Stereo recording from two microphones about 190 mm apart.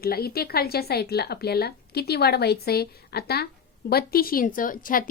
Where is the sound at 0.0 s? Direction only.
55° left (ahead or behind).